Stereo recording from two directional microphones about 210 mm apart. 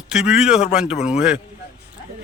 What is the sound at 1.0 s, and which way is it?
Speech, 30° left (ahead or behind).